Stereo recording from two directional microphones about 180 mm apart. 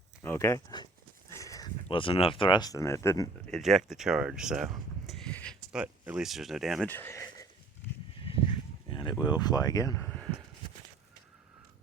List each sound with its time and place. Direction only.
0.2 s speech: 15° left (ahead or behind)
3.5 s speech: centre (ahead or behind)
5.8 s speech: 5° right (ahead or behind)
6.9 s a sound: 15° left (ahead or behind)
8.9 s a sound: 25° left (ahead or behind)
9.2 s speech: 20° left (ahead or behind)